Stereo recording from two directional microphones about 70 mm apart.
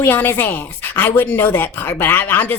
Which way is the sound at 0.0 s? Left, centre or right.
Left.